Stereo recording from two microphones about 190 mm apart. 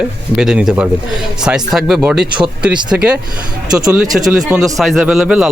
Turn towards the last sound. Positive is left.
turn(degrees=-5)  # may be behind; listen again after turning